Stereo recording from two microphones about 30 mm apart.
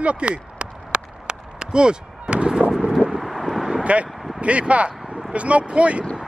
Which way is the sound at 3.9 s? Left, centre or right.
Right.